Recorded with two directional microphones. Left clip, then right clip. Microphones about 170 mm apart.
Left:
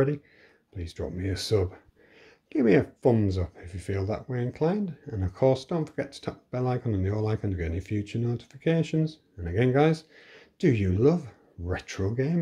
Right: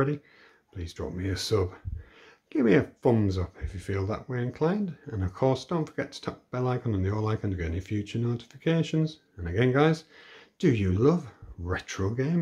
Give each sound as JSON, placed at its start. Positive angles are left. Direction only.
{"t": 0.7, "sound": "speech", "side_deg": 5}